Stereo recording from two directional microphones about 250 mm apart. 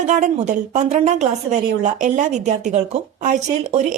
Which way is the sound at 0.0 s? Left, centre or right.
Right.